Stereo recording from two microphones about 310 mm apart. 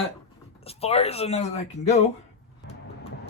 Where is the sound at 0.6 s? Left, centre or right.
Centre.